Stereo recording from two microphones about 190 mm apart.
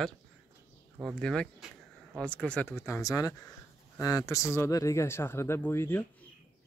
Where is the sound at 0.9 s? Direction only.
Centre (ahead or behind).